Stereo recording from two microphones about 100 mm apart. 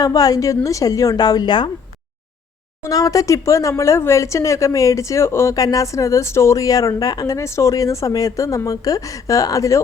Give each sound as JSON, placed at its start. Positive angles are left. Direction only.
{"t": 0.0, "sound": "speech", "side_deg": 40}
{"t": 2.8, "sound": "speech", "side_deg": 35}